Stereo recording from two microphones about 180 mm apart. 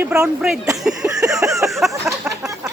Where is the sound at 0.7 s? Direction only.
Centre (ahead or behind).